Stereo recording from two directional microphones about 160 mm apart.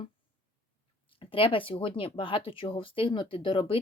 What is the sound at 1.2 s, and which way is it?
A woman's voice, 35° left (ahead or behind).